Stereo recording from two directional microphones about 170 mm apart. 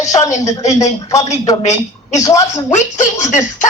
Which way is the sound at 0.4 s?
20° left (ahead or behind).